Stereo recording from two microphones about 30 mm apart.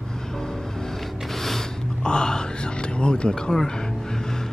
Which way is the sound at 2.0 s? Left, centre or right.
Left.